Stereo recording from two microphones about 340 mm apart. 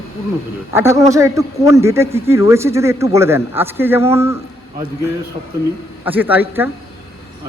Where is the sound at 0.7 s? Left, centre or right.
Centre.